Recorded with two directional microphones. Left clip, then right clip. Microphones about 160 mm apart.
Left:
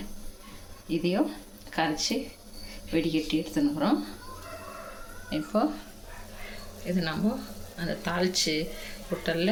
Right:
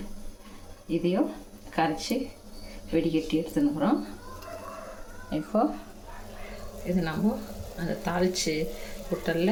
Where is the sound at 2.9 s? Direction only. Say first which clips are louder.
Right 1 dB; centre (ahead or behind).